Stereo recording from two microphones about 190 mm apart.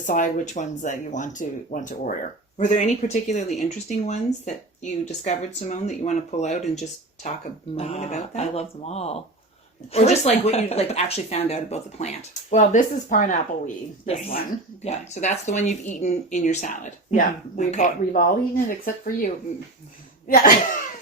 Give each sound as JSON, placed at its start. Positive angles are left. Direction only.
{"t": 0.0, "sound": "speech", "side_deg": 40}
{"t": 14.8, "sound": "speech", "side_deg": 35}